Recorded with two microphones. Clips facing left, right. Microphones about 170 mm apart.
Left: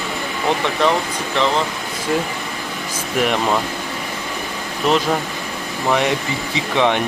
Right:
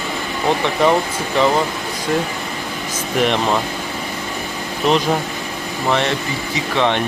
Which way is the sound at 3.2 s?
5° left (ahead or behind).